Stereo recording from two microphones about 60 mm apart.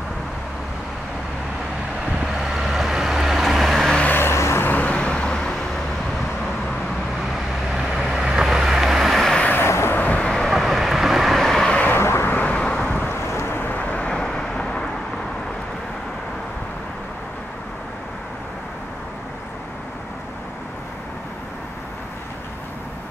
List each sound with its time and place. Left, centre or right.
2.3 s vehicle: centre
4.2 s vehicle: left
4.6 s vehicle: left
7.7 s vehicle: centre
9.7 s vehicle: left
9.9 s vehicle: left
10.2 s vehicle: centre
10.5 s vehicle: centre
12.0 s vehicle: left
12.3 s vehicle: left
12.8 s wind noise: left
13.1 s vehicle: left
14.1 s vehicle: centre